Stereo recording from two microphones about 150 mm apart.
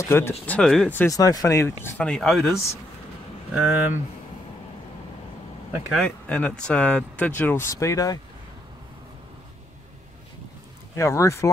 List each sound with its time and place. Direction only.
0.0 s speech: 15° left (ahead or behind)
0.5 s speech: 5° left (ahead or behind)
1.1 s speech: 25° left (ahead or behind)
2.0 s speech: 5° left (ahead or behind)
3.5 s speech: 5° right (ahead or behind)
5.9 s speech: 5° left (ahead or behind); by 8.2 s 20° left (ahead or behind)
11.0 s speech: 20° left (ahead or behind)